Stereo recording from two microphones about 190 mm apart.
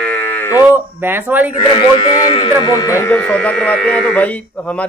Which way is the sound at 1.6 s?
30° left (ahead or behind).